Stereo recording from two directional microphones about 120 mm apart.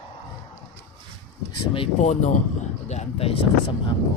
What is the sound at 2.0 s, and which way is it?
Speech, 75° left (ahead or behind).